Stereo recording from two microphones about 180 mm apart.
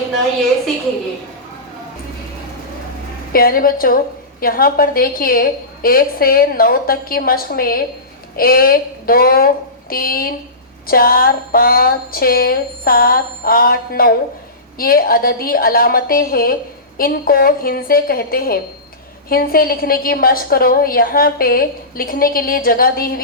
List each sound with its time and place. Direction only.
3.3 s a woman's voice: 55° left (ahead or behind)